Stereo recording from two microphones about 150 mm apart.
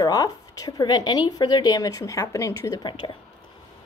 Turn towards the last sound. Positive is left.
turn(degrees=30)  # may be behind; listen again after turning